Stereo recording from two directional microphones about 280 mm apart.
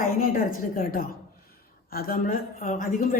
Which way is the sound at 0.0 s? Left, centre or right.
Left.